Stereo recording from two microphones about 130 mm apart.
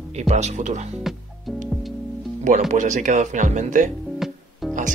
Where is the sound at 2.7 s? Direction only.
70° right (ahead or behind).